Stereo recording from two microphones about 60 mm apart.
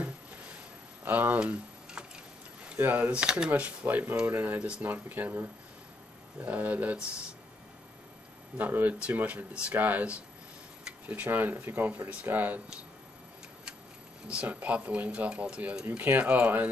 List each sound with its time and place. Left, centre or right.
1.0 s speech: right
1.4 s a sound: centre
2.8 s speech: right
3.1 s speech: centre
3.8 s speech: right
8.5 s speech: right
11.1 s speech: right
14.2 s speech: right
16.0 s speech: right